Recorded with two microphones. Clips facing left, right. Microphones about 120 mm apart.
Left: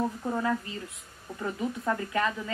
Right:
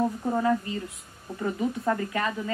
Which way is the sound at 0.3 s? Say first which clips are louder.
Right 5 dB; 20° right (ahead or behind).